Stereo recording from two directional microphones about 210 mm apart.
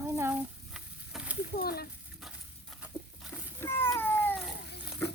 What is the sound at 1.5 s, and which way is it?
Speech, 45° left (ahead or behind).